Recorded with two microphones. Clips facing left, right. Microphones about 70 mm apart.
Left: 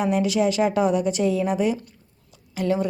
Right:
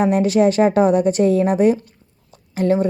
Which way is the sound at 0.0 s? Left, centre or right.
Right.